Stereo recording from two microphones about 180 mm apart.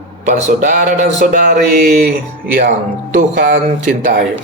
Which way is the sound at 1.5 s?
60° right (ahead or behind).